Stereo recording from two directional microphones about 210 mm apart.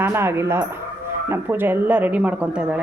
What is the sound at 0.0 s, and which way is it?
Speech, 10° right (ahead or behind).